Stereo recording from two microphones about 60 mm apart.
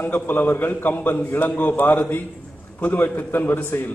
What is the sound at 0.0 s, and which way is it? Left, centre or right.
A man's voice, left.